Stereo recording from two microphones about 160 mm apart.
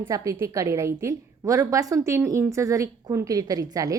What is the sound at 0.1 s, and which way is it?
A woman's voice, 20° right (ahead or behind).